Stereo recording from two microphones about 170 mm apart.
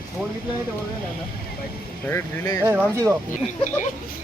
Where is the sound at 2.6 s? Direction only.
10° right (ahead or behind).